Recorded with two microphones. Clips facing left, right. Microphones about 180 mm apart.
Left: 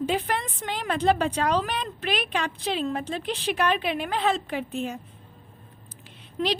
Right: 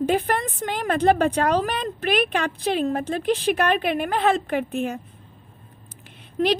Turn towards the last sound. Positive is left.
turn(degrees=-55)  # may be behind; listen again after turning